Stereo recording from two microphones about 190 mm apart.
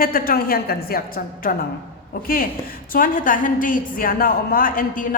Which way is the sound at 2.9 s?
45° left (ahead or behind).